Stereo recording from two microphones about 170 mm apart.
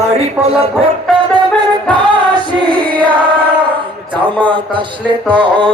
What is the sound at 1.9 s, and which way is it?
Music, 25° right (ahead or behind).